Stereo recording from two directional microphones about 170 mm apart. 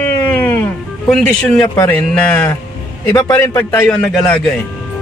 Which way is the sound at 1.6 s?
25° left (ahead or behind).